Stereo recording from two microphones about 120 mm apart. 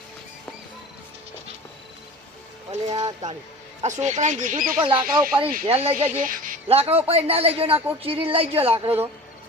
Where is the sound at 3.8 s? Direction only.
75° right (ahead or behind); by 4.6 s 90° right.